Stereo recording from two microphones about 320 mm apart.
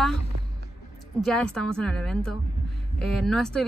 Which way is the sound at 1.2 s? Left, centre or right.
Centre.